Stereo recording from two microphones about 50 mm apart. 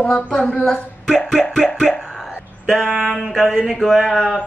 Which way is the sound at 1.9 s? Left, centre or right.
Centre.